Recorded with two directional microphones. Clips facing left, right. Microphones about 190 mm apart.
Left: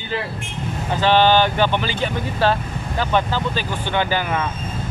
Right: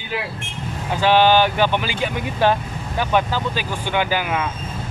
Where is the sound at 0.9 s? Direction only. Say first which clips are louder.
Even; 10° right (ahead or behind).